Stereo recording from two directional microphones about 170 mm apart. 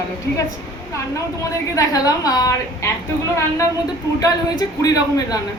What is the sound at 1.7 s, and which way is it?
A woman's voice, 20° left (ahead or behind).